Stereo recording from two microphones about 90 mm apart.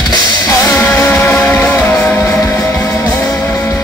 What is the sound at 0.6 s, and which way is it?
Music, 25° left (ahead or behind).